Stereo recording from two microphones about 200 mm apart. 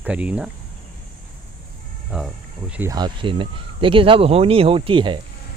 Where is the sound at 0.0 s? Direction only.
5° right (ahead or behind).